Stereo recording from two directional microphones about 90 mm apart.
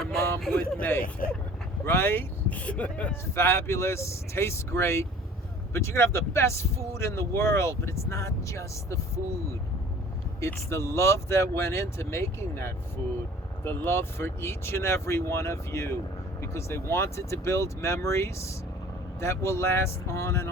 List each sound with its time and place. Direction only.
0.0 s a sound: 5° left (ahead or behind)
0.5 s speech: 20° left (ahead or behind)
3.3 s speech: 30° left (ahead or behind)
10.4 s speech: 30° left (ahead or behind)